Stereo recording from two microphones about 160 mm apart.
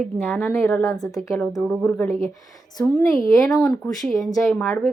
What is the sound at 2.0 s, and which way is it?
Speech, 35° right (ahead or behind).